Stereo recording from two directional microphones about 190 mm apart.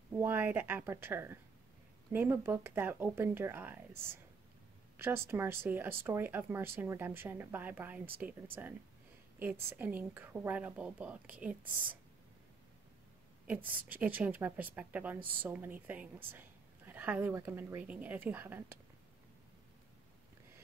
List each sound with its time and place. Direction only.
0.1 s speech: 10° right (ahead or behind)
13.7 s speech: 10° right (ahead or behind)